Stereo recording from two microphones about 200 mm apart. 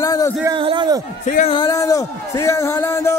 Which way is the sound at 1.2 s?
40° left (ahead or behind).